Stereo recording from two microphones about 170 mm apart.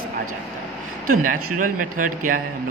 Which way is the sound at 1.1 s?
50° right (ahead or behind).